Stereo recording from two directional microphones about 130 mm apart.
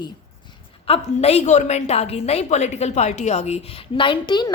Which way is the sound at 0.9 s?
50° left (ahead or behind).